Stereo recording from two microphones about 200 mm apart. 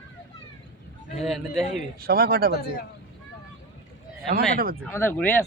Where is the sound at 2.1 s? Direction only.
50° right (ahead or behind).